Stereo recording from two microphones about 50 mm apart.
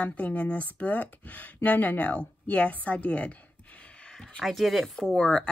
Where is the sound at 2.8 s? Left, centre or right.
Left.